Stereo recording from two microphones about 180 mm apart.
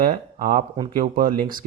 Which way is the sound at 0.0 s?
45° right (ahead or behind).